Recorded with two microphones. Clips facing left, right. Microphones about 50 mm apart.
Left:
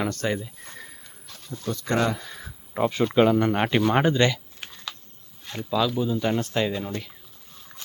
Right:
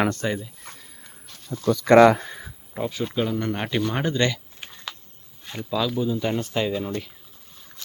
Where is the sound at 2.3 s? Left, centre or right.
Centre.